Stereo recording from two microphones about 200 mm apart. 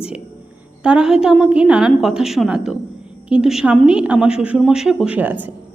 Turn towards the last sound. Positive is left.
turn(degrees=-10)  # may be behind; listen again after turning